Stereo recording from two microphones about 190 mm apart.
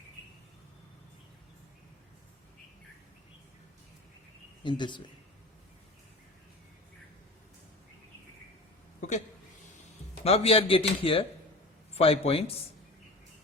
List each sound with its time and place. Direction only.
4.6 s speech: 25° left (ahead or behind)
9.0 s a sound: 40° left (ahead or behind)
10.2 s speech: 30° left (ahead or behind)